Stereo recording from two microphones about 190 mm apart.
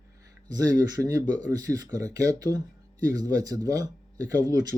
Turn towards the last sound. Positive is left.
turn(degrees=-20)  # may be behind; listen again after turning